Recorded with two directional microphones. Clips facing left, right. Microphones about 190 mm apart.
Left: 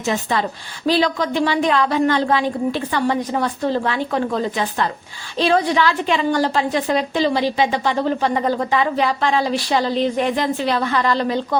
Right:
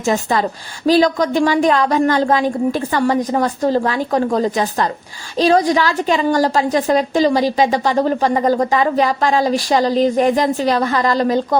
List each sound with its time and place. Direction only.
0.0 s a woman's voice: 45° right (ahead or behind)